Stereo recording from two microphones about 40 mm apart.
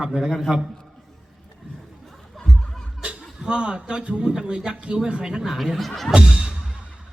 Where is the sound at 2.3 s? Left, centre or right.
Centre.